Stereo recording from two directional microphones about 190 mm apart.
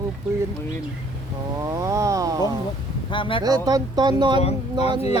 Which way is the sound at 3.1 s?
25° left (ahead or behind).